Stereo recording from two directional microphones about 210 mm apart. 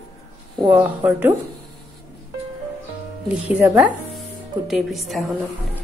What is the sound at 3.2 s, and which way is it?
Speech, 5° right (ahead or behind).